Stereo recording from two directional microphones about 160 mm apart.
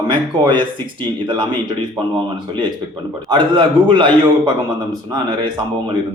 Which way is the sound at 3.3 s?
30° right (ahead or behind).